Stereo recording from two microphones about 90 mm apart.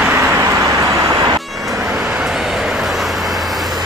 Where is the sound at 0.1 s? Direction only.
30° right (ahead or behind).